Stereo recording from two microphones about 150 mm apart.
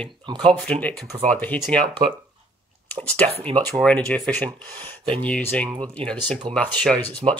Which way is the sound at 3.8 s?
5° left (ahead or behind).